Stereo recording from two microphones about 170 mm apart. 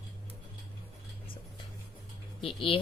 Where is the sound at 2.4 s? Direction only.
30° left (ahead or behind).